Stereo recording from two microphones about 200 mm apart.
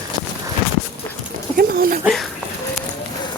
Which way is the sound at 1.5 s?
45° right (ahead or behind).